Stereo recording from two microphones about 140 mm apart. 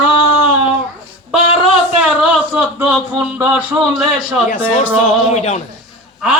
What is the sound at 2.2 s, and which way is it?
A man's voice, 5° right (ahead or behind).